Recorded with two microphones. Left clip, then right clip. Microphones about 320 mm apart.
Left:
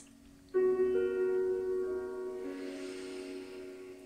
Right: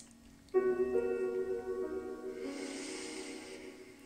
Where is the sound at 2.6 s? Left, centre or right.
Centre.